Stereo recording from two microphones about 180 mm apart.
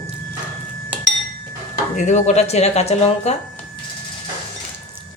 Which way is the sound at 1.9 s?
40° left (ahead or behind).